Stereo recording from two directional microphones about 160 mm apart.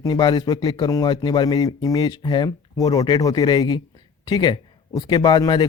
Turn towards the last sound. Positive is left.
turn(degrees=25)  # may be behind; listen again after turning